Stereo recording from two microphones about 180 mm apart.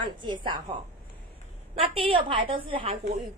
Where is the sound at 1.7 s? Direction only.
30° right (ahead or behind).